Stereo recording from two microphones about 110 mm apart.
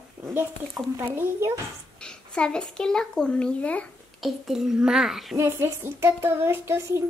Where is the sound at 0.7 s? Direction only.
25° right (ahead or behind).